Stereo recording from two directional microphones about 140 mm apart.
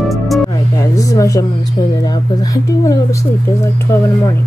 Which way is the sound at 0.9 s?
25° left (ahead or behind).